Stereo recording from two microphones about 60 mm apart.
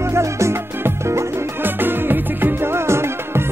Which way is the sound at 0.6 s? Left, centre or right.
Right.